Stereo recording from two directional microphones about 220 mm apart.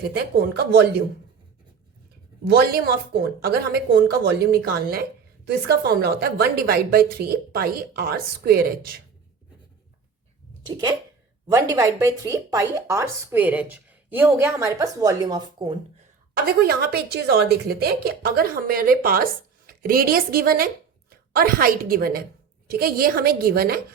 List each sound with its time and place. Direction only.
0.5 s a woman's voice: 45° right (ahead or behind)
2.5 s a woman's voice: 45° right (ahead or behind)
11.5 s speech: 15° right (ahead or behind)
16.3 s a woman's voice: 45° right (ahead or behind)